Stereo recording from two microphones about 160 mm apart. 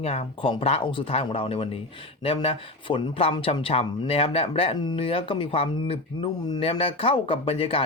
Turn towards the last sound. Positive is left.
turn(degrees=35)  # may be behind; listen again after turning